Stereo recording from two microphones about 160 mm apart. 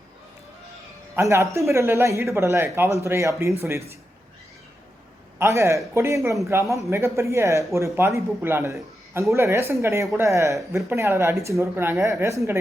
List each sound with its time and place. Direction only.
1.1 s speech: 15° right (ahead or behind)
5.4 s speech: 15° right (ahead or behind)